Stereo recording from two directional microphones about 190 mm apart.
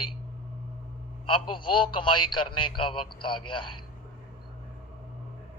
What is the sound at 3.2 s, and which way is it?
Speech, 25° left (ahead or behind).